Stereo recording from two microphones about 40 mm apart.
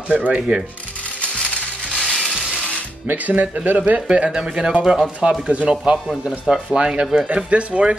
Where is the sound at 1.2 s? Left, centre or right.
Left.